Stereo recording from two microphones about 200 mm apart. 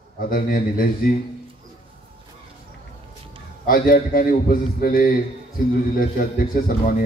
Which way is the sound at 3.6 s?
45° left (ahead or behind).